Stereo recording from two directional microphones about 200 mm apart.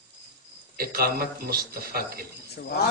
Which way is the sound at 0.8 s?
50° right (ahead or behind).